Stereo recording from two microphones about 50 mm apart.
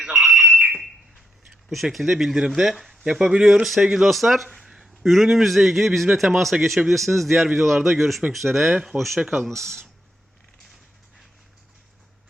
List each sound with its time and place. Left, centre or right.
0.0 s a sound: centre
1.7 s a man's voice: centre
3.0 s a man's voice: centre
9.5 s speech: right